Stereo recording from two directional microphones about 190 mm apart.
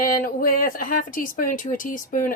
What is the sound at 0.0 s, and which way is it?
Speech, 50° left (ahead or behind).